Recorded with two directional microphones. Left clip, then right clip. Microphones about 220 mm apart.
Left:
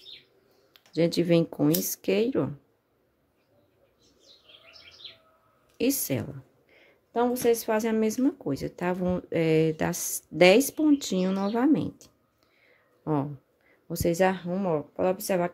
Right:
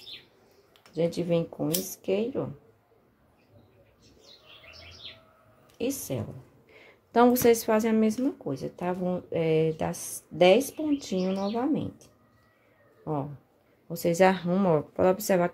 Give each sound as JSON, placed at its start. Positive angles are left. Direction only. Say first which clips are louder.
{"t": 0.7, "sound": "speech", "louder": "left 3 dB", "side_deg": 35}
{"t": 5.8, "sound": "speech", "louder": "left 4 dB", "side_deg": 35}
{"t": 7.1, "sound": "speech", "louder": "right 4 dB", "side_deg": -10}
{"t": 13.8, "sound": "speech", "louder": "left 1 dB", "side_deg": 20}
{"t": 14.1, "sound": "speech", "louder": "right 3 dB", "side_deg": 5}
{"t": 14.4, "sound": "speech", "louder": "right 3 dB", "side_deg": -5}